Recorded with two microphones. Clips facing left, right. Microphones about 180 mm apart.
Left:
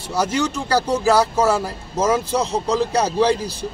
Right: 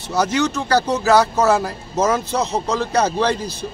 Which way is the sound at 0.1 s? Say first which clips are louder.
Right 2 dB; 10° left (ahead or behind).